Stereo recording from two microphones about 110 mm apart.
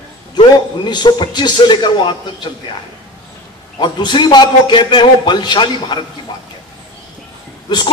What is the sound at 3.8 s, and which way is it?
A man's voice, 45° left (ahead or behind).